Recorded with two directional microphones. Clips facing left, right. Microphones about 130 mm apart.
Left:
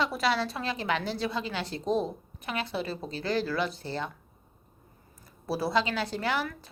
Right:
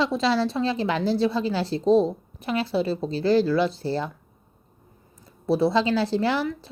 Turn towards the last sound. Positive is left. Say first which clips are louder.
# right 7 dB
turn(degrees=-30)  # may be behind; listen again after turning